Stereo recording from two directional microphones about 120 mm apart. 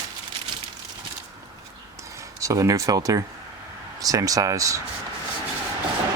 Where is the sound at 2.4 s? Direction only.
25° right (ahead or behind).